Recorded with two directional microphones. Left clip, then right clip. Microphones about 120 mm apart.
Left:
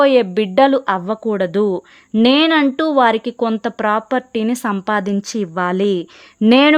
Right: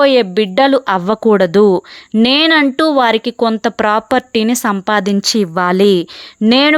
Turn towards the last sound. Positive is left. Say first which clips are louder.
# right 1 dB
turn(degrees=-5)  # may be behind; listen again after turning